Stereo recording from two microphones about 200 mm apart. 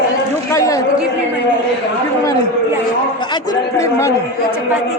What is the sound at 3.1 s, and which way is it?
Speech, 20° left (ahead or behind).